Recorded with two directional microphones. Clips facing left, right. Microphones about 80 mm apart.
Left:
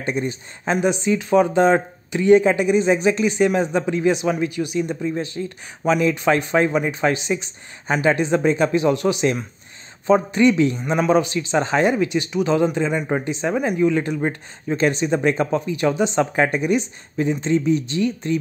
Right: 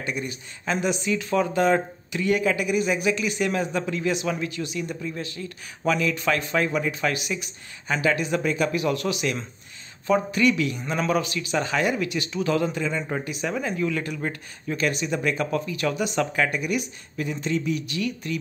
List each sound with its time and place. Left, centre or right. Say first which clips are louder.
0.0 s speech: left 6 dB; left